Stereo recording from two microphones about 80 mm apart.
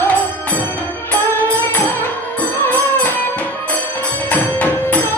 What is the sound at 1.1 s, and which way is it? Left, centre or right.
Music, left.